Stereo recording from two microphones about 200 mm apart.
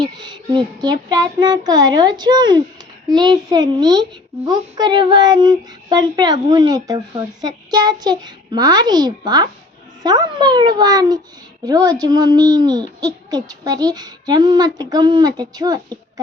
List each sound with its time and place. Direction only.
0.0 s speech: 20° right (ahead or behind)